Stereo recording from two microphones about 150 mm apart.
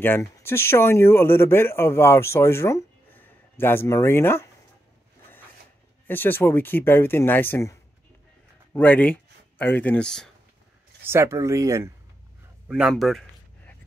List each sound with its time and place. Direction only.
0.0 s speech: 15° left (ahead or behind)
6.0 s speech: 15° left (ahead or behind)
8.7 s speech: 10° left (ahead or behind)
11.1 s speech: 20° right (ahead or behind)
12.6 s a man's voice: 5° right (ahead or behind)